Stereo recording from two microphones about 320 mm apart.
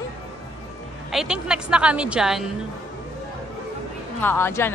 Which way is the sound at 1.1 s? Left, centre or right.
Centre.